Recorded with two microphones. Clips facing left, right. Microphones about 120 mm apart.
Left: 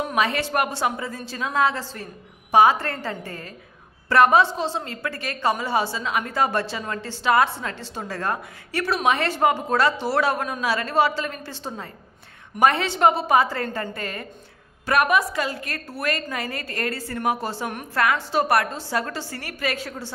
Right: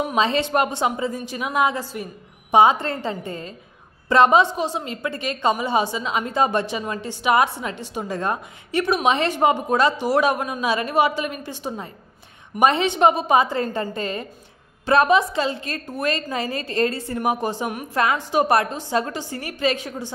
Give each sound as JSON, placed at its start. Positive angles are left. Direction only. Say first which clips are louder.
{"t": 0.0, "sound": "a woman's voice", "louder": "right 3 dB", "side_deg": -25}